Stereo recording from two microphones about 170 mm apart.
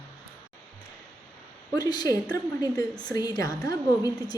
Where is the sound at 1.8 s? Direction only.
20° left (ahead or behind).